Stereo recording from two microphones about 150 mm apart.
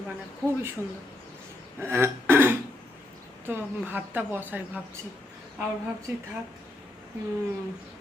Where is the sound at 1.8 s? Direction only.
15° right (ahead or behind).